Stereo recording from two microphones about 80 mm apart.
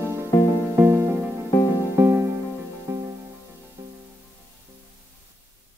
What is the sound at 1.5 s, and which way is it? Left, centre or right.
Music, left.